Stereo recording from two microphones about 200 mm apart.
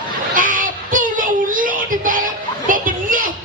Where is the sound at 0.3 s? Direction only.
40° right (ahead or behind).